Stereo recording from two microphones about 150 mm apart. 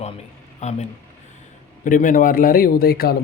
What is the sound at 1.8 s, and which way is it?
A man's voice, 60° left (ahead or behind).